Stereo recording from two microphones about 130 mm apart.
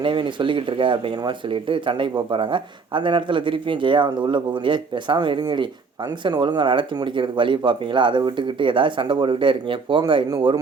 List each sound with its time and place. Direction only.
0.0 s speech: 40° right (ahead or behind)